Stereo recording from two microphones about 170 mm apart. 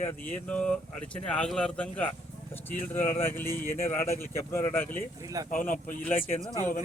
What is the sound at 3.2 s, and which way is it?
Speech, 15° left (ahead or behind).